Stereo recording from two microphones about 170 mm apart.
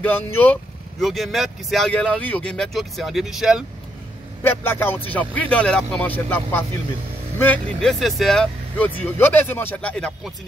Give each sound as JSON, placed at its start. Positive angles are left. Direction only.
{"t": 0.0, "sound": "speech", "side_deg": 10}
{"t": 4.4, "sound": "speech", "side_deg": 15}